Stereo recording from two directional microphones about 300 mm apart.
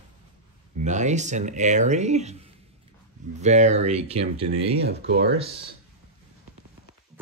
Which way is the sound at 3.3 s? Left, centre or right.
Right.